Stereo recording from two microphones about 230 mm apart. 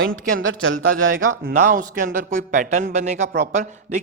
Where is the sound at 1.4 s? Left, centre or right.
Right.